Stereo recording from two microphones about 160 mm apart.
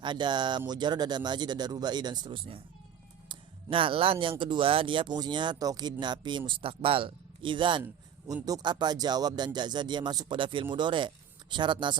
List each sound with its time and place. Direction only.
0.0 s speech: 30° right (ahead or behind)